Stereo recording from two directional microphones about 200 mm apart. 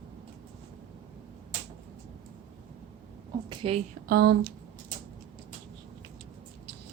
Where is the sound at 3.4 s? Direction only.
30° right (ahead or behind).